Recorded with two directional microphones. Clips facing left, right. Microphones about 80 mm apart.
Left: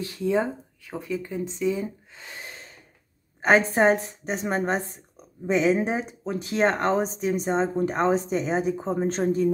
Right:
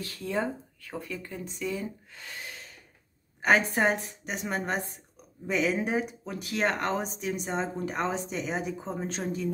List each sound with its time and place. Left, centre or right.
0.0 s a woman's voice: centre; by 9.5 s left